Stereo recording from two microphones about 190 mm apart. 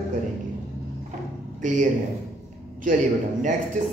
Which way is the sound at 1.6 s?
40° right (ahead or behind).